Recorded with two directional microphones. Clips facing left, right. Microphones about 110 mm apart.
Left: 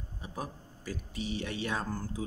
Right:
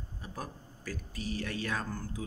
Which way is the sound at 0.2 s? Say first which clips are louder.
Left 3 dB; 20° left (ahead or behind).